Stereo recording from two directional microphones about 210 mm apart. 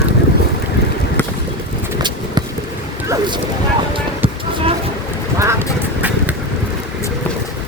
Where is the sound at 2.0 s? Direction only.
20° right (ahead or behind).